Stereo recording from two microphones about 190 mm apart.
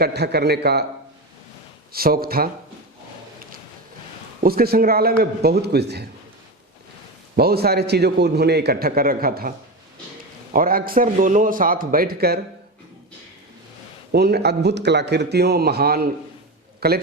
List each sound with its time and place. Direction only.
0.0 s a man's voice: 60° right (ahead or behind)
1.9 s a man's voice: 50° right (ahead or behind)
4.4 s a man's voice: 55° right (ahead or behind)
7.3 s a man's voice: 55° right (ahead or behind)
10.5 s a man's voice: 50° right (ahead or behind)
14.1 s a man's voice: 60° right (ahead or behind)